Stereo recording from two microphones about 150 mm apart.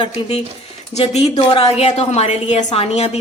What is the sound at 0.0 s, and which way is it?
A woman's voice, 35° left (ahead or behind).